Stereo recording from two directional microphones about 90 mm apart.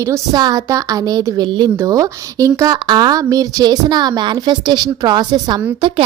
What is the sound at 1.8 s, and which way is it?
Speech, 40° right (ahead or behind).